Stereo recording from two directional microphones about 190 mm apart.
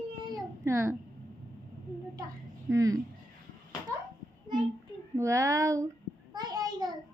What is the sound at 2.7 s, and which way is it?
Speech, 15° right (ahead or behind).